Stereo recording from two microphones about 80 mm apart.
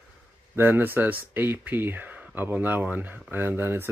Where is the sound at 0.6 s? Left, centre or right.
Right.